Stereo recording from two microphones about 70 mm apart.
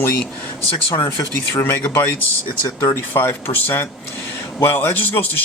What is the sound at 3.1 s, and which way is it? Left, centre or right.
A man's voice, left.